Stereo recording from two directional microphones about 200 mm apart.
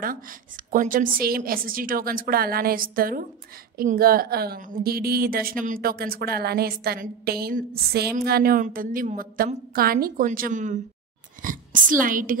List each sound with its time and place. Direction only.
0.7 s a woman's voice: 45° right (ahead or behind)